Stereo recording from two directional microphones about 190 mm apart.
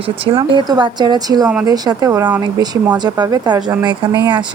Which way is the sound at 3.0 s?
20° right (ahead or behind).